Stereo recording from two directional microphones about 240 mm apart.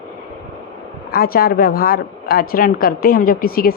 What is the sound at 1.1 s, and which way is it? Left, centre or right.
A woman's voice, left.